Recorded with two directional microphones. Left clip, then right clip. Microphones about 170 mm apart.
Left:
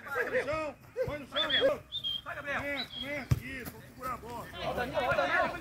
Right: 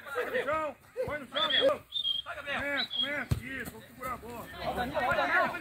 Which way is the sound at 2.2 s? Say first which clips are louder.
Even; centre (ahead or behind).